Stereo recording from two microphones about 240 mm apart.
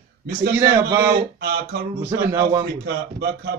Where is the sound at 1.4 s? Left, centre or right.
Right.